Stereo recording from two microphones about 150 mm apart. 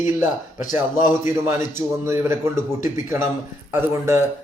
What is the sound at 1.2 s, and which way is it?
Speech, 15° right (ahead or behind).